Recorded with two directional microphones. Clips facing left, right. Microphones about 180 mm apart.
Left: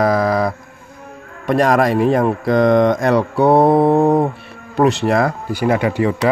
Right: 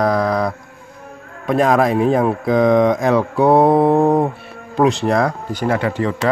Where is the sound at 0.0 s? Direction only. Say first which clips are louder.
Left 1 dB; 5° left (ahead or behind).